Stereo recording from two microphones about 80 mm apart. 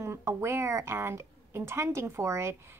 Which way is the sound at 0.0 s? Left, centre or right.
Right.